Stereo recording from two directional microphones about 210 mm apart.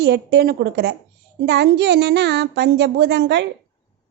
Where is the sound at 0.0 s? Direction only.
50° right (ahead or behind).